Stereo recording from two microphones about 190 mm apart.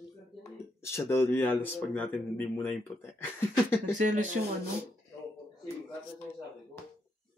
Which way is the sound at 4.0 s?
40° right (ahead or behind).